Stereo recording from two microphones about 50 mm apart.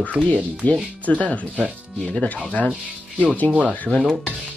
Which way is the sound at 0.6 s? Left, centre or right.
Left.